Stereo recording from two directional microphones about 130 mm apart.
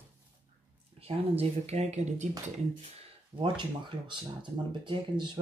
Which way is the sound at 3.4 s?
40° right (ahead or behind).